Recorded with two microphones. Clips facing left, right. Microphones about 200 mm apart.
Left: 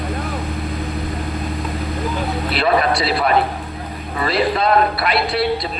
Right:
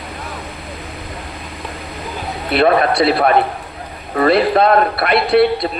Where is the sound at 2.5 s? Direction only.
55° right (ahead or behind).